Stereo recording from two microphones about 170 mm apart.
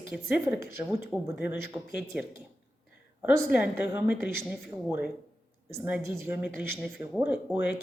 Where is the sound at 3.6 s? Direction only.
15° right (ahead or behind).